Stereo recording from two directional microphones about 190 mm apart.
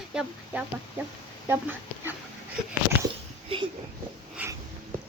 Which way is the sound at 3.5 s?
30° right (ahead or behind).